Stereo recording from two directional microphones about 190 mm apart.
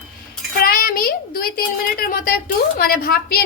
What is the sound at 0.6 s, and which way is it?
A child's voice, 50° left (ahead or behind).